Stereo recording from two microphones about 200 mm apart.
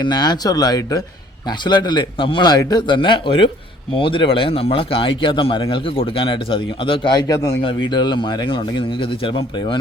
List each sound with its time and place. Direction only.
0.0 s speech: 20° left (ahead or behind)